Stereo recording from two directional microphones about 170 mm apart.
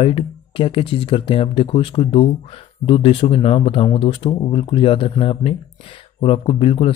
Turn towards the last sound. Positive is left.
turn(degrees=30)  # may be behind; listen again after turning